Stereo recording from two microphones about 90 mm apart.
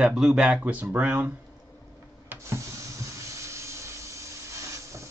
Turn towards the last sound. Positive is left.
turn(degrees=-35)  # may be behind; listen again after turning